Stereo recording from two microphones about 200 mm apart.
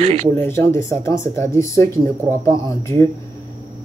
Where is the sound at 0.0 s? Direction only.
30° right (ahead or behind).